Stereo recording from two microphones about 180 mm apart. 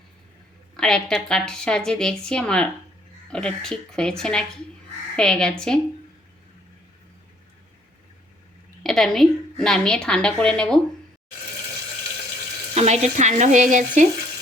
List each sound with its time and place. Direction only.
0.8 s a woman's voice: 5° left (ahead or behind)
8.8 s a woman's voice: centre (ahead or behind)
12.7 s frying: 40° right (ahead or behind)